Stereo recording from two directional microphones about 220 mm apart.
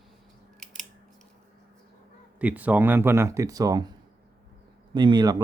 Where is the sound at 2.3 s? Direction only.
5° right (ahead or behind).